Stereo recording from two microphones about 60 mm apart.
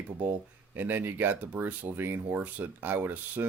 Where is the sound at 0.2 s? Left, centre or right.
Right.